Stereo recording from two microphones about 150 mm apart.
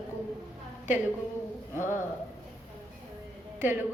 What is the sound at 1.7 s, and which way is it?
Speech, 15° right (ahead or behind).